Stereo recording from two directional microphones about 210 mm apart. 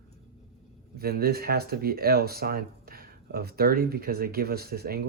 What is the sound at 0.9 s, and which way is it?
Speech, 45° right (ahead or behind).